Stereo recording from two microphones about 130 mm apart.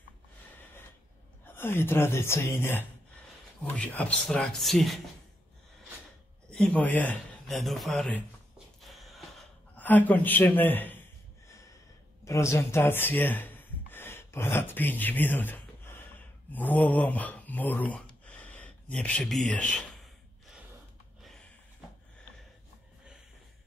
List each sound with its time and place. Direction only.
1.4 s a man's voice: 15° left (ahead or behind); by 5.0 s centre (ahead or behind)
6.5 s speech: 10° left (ahead or behind)
7.4 s speech: centre (ahead or behind)
8.8 s a sound: centre (ahead or behind)
9.8 s a man's voice: 15° left (ahead or behind)
12.3 s speech: 20° left (ahead or behind)
18.2 s a sound: 10° left (ahead or behind)